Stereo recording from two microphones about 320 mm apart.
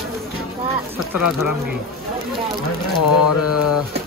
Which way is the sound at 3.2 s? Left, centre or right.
Left.